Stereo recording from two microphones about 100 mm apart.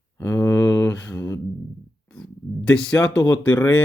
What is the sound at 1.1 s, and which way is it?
Speech, 25° left (ahead or behind).